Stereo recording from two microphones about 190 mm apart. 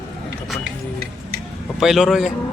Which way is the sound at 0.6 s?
60° right (ahead or behind).